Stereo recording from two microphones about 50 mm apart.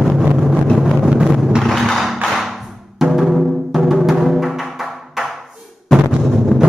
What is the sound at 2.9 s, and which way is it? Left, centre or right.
Music, centre.